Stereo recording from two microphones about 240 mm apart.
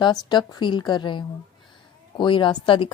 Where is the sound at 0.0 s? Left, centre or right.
Centre.